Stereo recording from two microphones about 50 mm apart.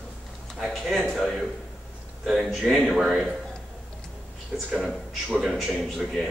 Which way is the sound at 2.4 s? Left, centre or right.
Centre.